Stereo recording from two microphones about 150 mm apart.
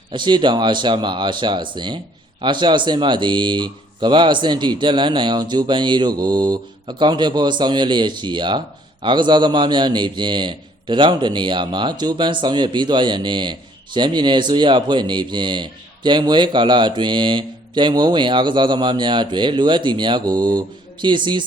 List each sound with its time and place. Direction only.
0.1 s speech: 30° right (ahead or behind)